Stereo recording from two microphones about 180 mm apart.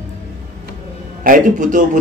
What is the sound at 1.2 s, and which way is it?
Speech, 45° right (ahead or behind).